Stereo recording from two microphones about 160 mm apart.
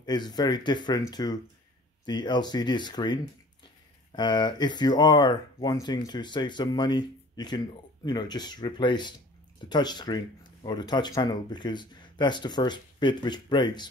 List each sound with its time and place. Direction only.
0.0 s speech: 25° left (ahead or behind)